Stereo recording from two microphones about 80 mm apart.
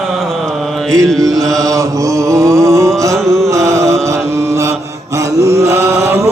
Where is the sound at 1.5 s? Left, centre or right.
Right.